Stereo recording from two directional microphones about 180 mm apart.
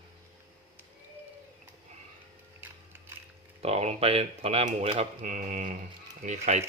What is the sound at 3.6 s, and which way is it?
Speech, 35° right (ahead or behind).